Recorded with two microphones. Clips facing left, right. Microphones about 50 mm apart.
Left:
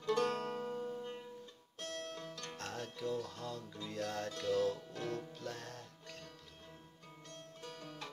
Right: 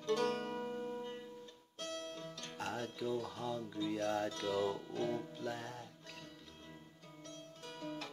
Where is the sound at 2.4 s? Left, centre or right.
Centre.